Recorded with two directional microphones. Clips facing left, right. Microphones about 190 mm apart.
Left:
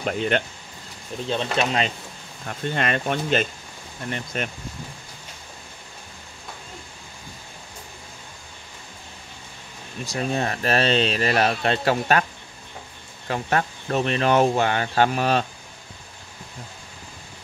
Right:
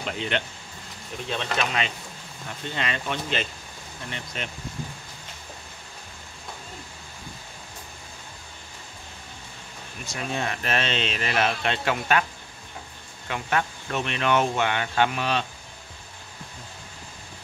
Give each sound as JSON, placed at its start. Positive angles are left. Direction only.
{"t": 0.0, "sound": "speech", "side_deg": 50}
{"t": 1.3, "sound": "speech", "side_deg": 30}
{"t": 2.7, "sound": "speech", "side_deg": 50}
{"t": 10.0, "sound": "speech", "side_deg": 35}
{"t": 13.3, "sound": "speech", "side_deg": 40}